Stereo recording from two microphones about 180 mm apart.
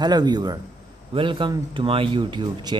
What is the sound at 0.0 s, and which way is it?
Speech, 25° right (ahead or behind).